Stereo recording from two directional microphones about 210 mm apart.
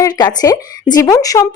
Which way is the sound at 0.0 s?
15° left (ahead or behind).